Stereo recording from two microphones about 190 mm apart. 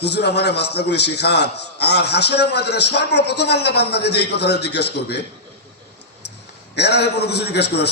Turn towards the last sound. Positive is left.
turn(degrees=60)  # may be behind; listen again after turning